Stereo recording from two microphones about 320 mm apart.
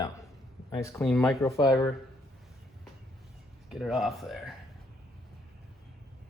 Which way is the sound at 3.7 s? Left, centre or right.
Centre.